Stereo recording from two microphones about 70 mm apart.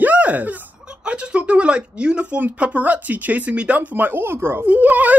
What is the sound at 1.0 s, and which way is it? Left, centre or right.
Speech, centre.